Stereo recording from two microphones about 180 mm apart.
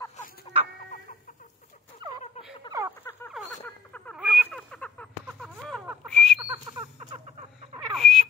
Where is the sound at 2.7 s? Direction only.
25° left (ahead or behind).